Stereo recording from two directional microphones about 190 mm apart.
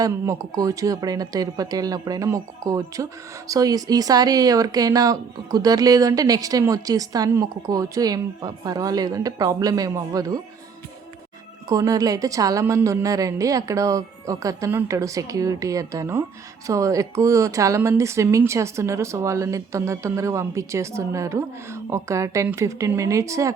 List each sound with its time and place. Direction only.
0.0 s speech: 15° right (ahead or behind)
11.7 s speech: 20° right (ahead or behind)